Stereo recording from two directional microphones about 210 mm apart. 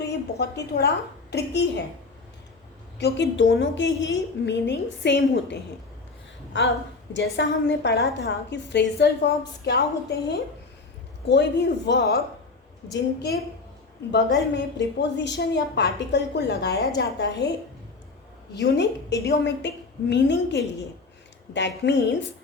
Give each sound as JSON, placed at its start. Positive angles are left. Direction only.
{"t": 0.0, "sound": "a woman's voice", "side_deg": 50}
{"t": 3.0, "sound": "a woman's voice", "side_deg": 60}
{"t": 6.5, "sound": "a woman's voice", "side_deg": 60}
{"t": 11.3, "sound": "a woman's voice", "side_deg": 55}
{"t": 18.5, "sound": "a woman's voice", "side_deg": 55}